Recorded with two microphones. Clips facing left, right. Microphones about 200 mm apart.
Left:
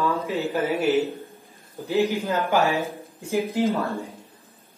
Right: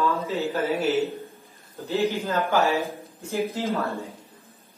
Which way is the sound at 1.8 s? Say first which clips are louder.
Left 2 dB; 15° left (ahead or behind).